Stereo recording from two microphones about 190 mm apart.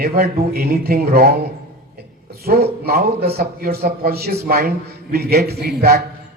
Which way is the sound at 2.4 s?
55° right (ahead or behind).